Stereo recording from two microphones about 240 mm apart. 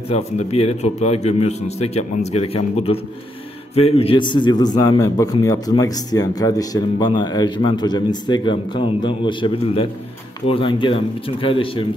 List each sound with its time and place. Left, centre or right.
0.1 s a man's voice: left